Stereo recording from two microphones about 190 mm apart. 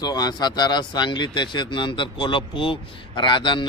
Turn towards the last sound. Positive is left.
turn(degrees=25)  # may be behind; listen again after turning